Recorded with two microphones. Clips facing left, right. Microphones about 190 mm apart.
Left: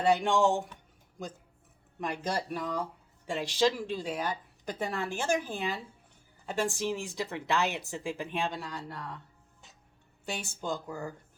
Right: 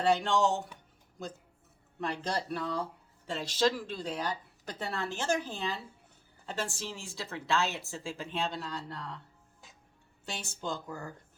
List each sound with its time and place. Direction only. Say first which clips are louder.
0.0 s speech: left 2 dB; 15° left (ahead or behind)
2.0 s speech: left 1 dB; 10° left (ahead or behind)
10.2 s speech: left 3 dB; 10° left (ahead or behind)